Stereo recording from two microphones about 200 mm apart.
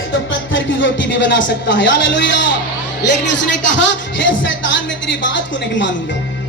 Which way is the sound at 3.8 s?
65° left (ahead or behind).